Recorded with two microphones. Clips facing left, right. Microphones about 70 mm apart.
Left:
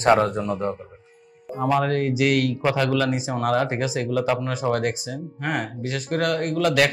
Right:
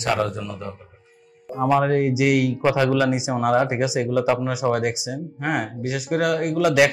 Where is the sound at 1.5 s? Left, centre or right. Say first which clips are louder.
Right 3 dB; centre.